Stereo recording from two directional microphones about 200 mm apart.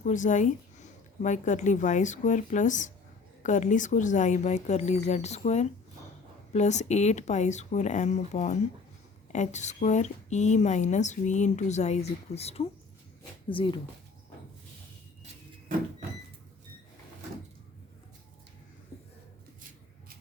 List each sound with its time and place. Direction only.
0.0 s a woman's voice: 40° left (ahead or behind)